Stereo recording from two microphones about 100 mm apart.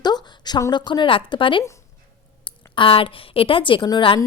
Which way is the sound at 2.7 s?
65° left (ahead or behind).